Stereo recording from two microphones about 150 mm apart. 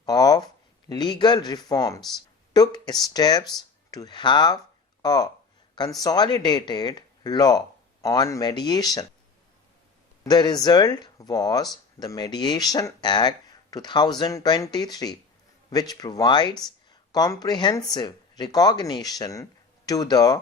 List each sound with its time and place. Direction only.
0.0 s speech: 25° left (ahead or behind)
10.2 s speech: 25° left (ahead or behind)